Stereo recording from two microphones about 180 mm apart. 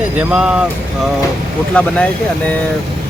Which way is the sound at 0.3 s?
5° right (ahead or behind).